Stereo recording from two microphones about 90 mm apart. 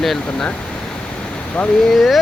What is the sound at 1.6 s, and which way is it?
Speech, 15° left (ahead or behind).